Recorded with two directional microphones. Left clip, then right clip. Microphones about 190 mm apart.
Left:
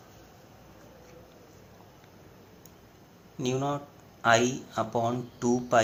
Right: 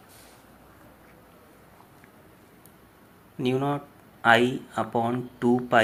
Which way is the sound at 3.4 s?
25° right (ahead or behind).